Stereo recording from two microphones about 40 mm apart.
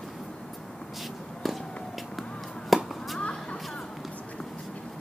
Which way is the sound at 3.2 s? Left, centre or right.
Left.